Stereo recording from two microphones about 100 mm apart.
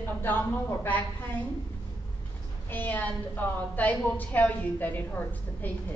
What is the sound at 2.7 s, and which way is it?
A woman's voice, 20° left (ahead or behind).